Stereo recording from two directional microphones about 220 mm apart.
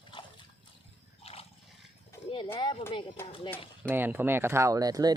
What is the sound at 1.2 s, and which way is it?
Water, 25° left (ahead or behind).